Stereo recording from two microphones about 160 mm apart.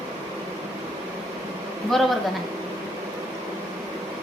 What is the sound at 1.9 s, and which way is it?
Speech, centre (ahead or behind).